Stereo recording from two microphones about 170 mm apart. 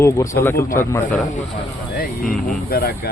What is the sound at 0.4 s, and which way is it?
Speech, 15° left (ahead or behind).